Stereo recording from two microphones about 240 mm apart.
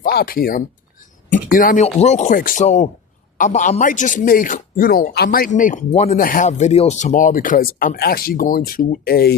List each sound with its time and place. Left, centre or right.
0.0 s a man's voice: left